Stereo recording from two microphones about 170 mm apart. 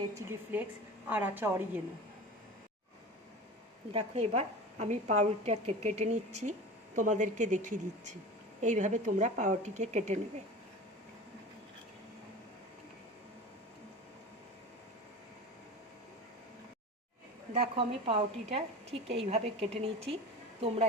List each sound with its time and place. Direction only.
0.1 s a woman's voice: 15° right (ahead or behind)
3.9 s a woman's voice: 40° right (ahead or behind)
17.5 s a woman's voice: 35° right (ahead or behind)